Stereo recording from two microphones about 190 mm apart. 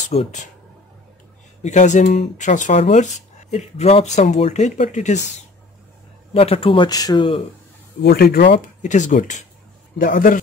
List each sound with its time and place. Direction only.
0.1 s speech: 35° left (ahead or behind)
1.6 s speech: 40° left (ahead or behind)
6.3 s speech: 30° left (ahead or behind)
8.0 s speech: 55° left (ahead or behind)
8.8 s a man's voice: 40° left (ahead or behind)